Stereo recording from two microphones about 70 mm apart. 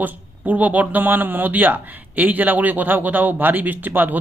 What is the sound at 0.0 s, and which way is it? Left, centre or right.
Speech, right.